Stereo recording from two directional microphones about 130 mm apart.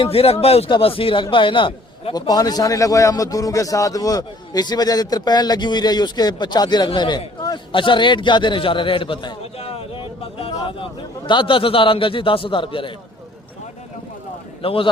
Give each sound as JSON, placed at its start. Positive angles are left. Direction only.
{"t": 0.0, "sound": "a man's voice", "side_deg": 50}
{"t": 14.6, "sound": "a man's voice", "side_deg": 45}